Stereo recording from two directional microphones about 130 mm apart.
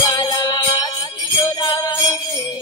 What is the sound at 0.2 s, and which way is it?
Music, 30° left (ahead or behind).